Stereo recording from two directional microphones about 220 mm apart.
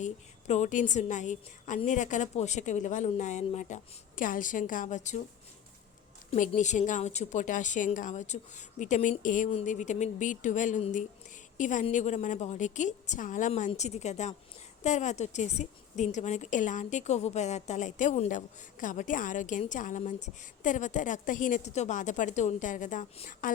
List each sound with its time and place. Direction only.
0.0 s a woman's voice: 30° left (ahead or behind)
6.3 s a woman's voice: 35° left (ahead or behind)